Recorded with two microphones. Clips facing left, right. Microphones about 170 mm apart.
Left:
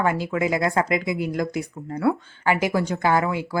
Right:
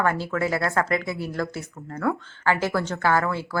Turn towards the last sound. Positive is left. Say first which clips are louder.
# left 2 dB
turn(degrees=15)  # may be behind; listen again after turning